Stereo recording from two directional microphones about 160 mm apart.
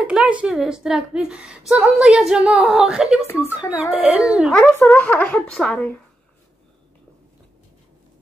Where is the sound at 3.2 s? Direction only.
15° left (ahead or behind).